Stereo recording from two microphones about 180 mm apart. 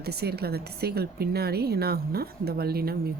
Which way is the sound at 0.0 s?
60° right (ahead or behind).